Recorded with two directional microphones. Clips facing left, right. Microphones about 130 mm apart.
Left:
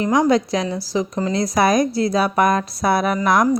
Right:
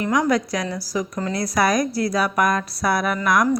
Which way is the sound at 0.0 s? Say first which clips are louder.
Left 4 dB; 25° left (ahead or behind).